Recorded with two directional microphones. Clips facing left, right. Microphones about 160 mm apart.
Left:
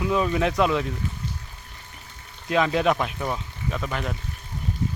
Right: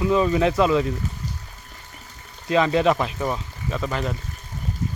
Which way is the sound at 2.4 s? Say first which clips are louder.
Right 3 dB; centre (ahead or behind).